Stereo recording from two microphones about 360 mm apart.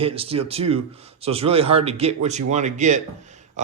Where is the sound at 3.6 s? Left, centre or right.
Centre.